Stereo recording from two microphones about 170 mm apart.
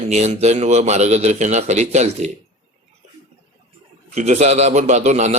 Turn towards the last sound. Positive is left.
turn(degrees=-45)  # may be behind; listen again after turning